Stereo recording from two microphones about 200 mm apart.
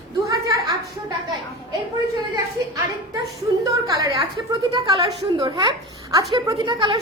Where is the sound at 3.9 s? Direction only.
20° right (ahead or behind).